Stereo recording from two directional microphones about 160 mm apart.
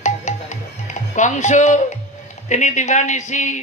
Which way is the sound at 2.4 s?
50° left (ahead or behind).